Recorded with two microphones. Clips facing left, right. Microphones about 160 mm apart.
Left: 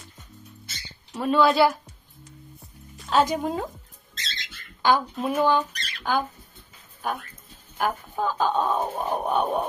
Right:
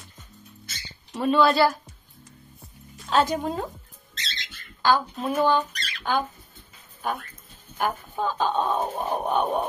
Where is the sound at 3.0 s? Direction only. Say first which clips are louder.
Left 1 dB; 10° left (ahead or behind).